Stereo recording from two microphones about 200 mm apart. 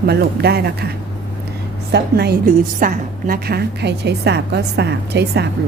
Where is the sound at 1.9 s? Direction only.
55° right (ahead or behind).